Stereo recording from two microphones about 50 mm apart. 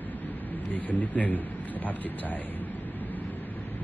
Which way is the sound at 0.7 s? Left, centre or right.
Left.